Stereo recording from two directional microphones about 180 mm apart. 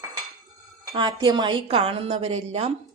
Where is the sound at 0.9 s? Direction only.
25° right (ahead or behind).